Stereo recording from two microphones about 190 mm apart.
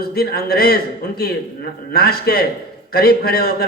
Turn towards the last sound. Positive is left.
turn(degrees=55)  # may be behind; listen again after turning